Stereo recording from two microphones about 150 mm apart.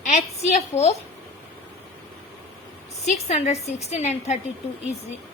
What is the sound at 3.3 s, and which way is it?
A woman's voice, 45° left (ahead or behind).